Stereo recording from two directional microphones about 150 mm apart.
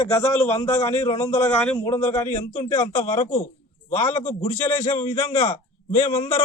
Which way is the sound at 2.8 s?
50° left (ahead or behind).